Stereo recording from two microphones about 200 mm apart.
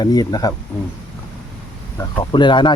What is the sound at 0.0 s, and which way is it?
Speech, 20° left (ahead or behind).